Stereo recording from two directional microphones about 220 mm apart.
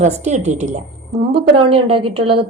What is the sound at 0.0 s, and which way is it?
A woman's voice, 30° right (ahead or behind).